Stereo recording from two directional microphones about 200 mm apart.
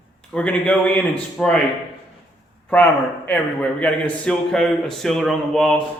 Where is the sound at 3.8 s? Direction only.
5° left (ahead or behind).